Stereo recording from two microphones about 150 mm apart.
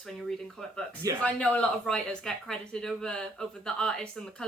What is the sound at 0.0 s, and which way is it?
Speech, centre (ahead or behind).